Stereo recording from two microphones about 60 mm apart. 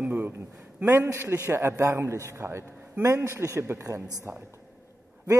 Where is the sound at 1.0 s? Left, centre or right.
Right.